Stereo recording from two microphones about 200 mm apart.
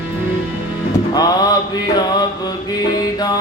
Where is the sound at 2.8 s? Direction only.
20° left (ahead or behind).